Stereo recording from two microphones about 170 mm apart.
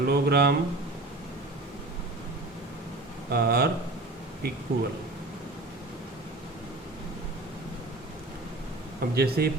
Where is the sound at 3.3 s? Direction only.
65° right (ahead or behind).